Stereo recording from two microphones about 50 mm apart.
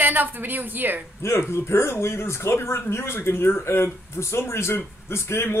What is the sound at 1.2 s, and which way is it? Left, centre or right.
A man's voice, left.